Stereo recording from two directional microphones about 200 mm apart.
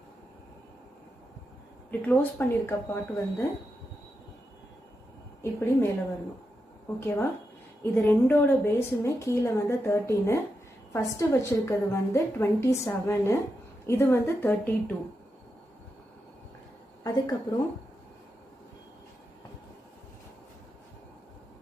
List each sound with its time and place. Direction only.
1.9 s a woman's voice: 5° left (ahead or behind)
5.4 s a woman's voice: 10° left (ahead or behind)
7.0 s a woman's voice: 10° left (ahead or behind)
17.0 s a woman's voice: 20° left (ahead or behind)